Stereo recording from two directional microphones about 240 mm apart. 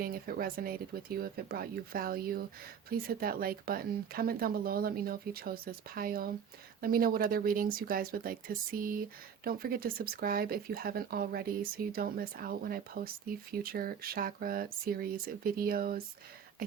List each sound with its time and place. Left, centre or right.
0.0 s speech: right